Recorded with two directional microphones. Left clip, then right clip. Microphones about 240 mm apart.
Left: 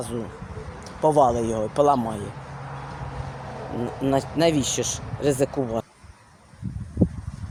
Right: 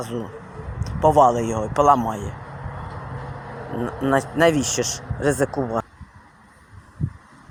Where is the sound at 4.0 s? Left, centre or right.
Centre.